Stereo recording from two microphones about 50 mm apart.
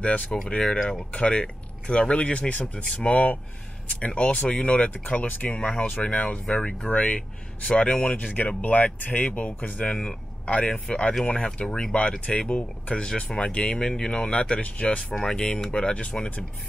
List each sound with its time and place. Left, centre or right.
0.0 s speech: left
15.1 s speech: centre